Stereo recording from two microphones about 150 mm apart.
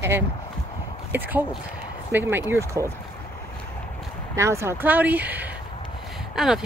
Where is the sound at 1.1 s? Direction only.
10° right (ahead or behind).